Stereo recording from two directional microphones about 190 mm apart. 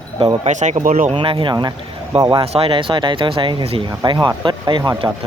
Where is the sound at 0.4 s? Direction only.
40° right (ahead or behind).